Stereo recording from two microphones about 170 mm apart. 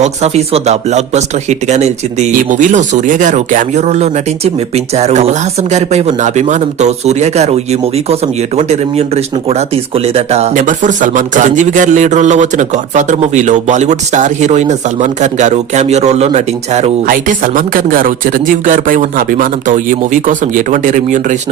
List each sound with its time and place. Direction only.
0.0 s speech: 40° right (ahead or behind)
17.1 s speech: 50° right (ahead or behind)